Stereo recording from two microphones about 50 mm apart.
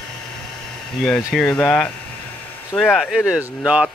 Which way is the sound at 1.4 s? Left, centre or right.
Left.